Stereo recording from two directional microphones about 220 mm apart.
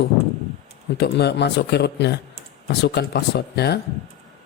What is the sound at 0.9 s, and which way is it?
A man's voice, 50° left (ahead or behind).